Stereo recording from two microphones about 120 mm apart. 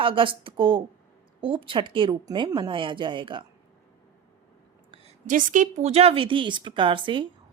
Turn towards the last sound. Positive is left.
turn(degrees=-45)  # may be behind; listen again after turning